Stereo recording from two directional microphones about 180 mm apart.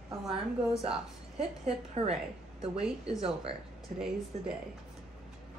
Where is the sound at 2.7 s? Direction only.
5° right (ahead or behind).